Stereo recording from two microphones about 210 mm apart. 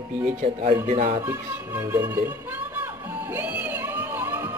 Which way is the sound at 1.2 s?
10° right (ahead or behind).